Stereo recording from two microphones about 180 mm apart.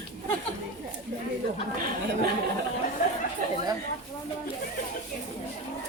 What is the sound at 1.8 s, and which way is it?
Speech, 50° right (ahead or behind).